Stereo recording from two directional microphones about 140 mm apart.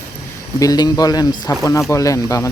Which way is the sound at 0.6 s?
25° left (ahead or behind).